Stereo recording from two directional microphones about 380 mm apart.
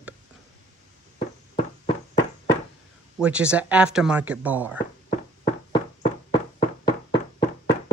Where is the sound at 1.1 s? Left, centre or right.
Centre.